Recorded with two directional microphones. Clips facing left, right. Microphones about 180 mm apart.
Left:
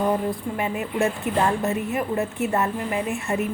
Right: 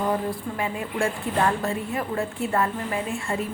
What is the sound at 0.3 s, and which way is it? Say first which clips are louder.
A woman's voice: left 2 dB; 20° left (ahead or behind).